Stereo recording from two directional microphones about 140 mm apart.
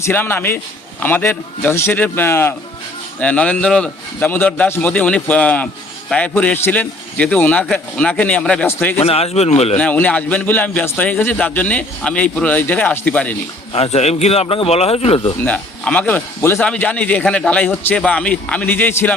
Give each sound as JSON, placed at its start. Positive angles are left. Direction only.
{"t": 0.0, "sound": "a man's voice", "side_deg": 15}
{"t": 9.0, "sound": "speech", "side_deg": 45}
{"t": 9.7, "sound": "a man's voice", "side_deg": 10}
{"t": 13.7, "sound": "speech", "side_deg": 45}
{"t": 15.4, "sound": "a man's voice", "side_deg": 10}